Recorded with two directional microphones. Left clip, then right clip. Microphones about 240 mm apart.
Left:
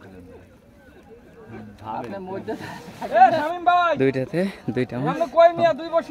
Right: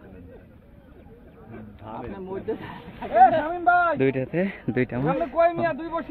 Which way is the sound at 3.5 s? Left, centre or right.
Centre.